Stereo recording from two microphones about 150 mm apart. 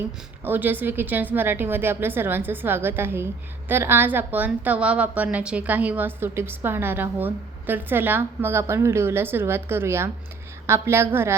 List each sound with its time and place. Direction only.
0.4 s a woman's voice: 15° right (ahead or behind)